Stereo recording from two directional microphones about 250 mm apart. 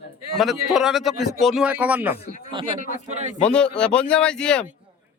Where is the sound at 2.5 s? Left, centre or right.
Centre.